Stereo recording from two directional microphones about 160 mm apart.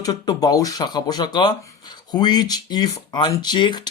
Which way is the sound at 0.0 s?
25° left (ahead or behind).